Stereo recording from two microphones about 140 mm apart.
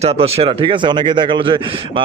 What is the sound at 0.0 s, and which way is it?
A man's voice, 45° right (ahead or behind).